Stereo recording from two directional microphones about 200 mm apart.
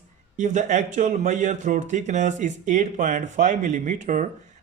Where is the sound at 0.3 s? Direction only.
35° right (ahead or behind).